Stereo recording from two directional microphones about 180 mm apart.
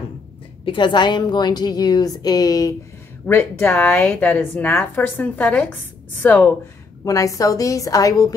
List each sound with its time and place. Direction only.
0.7 s a woman's voice: 25° left (ahead or behind)